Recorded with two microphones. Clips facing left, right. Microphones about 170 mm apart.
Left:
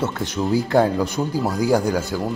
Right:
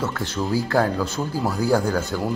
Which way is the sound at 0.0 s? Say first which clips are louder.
Left 3 dB; 20° left (ahead or behind).